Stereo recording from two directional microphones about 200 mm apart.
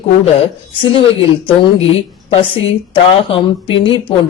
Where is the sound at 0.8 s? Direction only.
25° left (ahead or behind).